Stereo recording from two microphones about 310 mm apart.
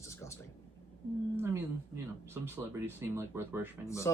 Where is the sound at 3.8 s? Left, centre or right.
Centre.